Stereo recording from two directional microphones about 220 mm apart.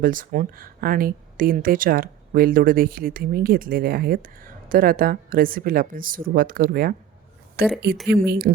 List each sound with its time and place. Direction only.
0.0 s speech: 40° right (ahead or behind)